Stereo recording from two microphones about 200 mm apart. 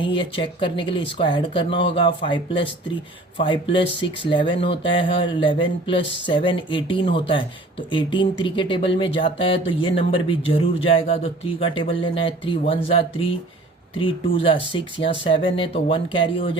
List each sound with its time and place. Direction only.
0.0 s speech: 25° left (ahead or behind)